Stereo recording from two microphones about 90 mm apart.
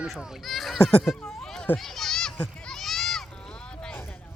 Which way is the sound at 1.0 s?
Centre (ahead or behind).